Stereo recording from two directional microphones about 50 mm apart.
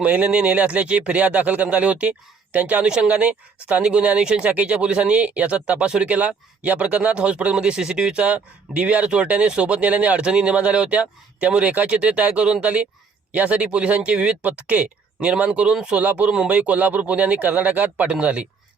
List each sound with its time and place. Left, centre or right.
0.0 s speech: right
4.4 s speech: right
6.1 s speech: right
16.0 s speech: right
16.3 s speech: right